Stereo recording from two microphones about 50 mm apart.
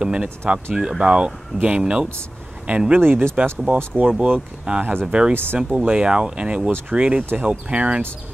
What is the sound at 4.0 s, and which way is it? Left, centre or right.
Speech, right.